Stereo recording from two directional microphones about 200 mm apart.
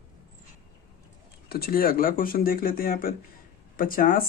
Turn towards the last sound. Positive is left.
turn(degrees=45)  # may be behind; listen again after turning